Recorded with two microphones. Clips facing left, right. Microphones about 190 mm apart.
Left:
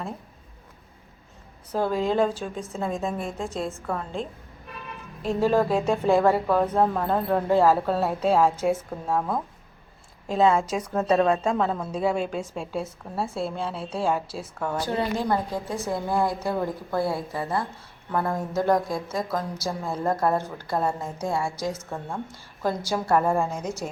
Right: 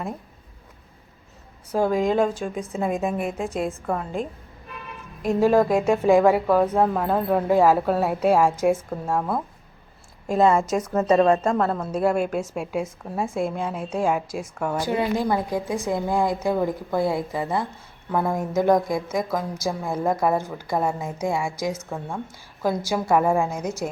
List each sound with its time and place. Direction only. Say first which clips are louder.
1.7 s speech: right 3 dB; 10° right (ahead or behind)